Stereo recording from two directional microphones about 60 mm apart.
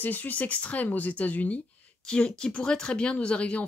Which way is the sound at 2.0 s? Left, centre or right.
Centre.